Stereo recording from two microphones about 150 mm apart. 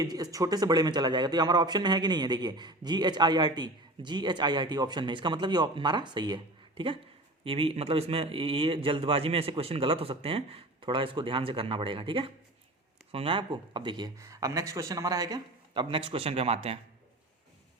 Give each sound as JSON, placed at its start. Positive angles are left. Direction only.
{"t": 0.0, "sound": "a man's voice", "side_deg": -25}